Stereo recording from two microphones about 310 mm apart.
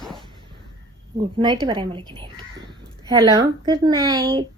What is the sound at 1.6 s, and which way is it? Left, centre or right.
Speech, centre.